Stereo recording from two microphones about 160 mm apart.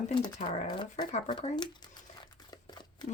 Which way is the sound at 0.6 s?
30° left (ahead or behind).